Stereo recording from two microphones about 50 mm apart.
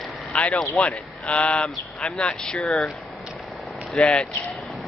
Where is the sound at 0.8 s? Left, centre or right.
Left; by 2.7 s centre.